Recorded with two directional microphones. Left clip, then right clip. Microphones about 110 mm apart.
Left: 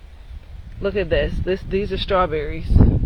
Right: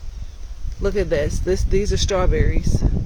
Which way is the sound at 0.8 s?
25° right (ahead or behind).